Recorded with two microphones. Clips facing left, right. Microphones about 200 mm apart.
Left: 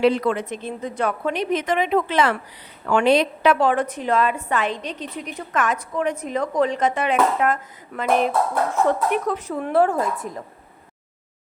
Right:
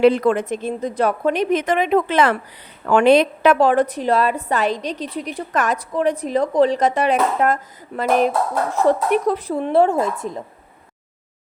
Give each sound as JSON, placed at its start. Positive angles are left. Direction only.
{"t": 0.0, "sound": "a woman's voice", "side_deg": -50}